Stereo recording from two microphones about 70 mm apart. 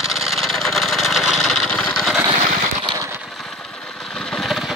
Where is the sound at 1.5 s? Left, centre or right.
Centre.